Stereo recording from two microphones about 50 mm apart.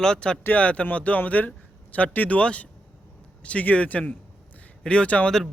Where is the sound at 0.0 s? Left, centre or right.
Centre.